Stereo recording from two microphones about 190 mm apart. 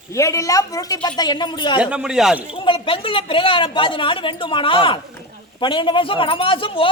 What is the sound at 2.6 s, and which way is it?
Speech, 30° left (ahead or behind).